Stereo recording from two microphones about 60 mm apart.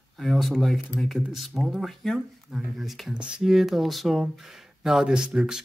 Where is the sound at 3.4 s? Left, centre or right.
Centre.